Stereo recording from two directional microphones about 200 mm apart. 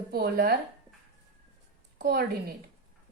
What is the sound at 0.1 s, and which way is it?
Speech, 50° right (ahead or behind).